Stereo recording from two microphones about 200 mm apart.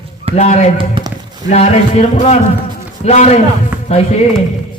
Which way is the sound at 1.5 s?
35° left (ahead or behind).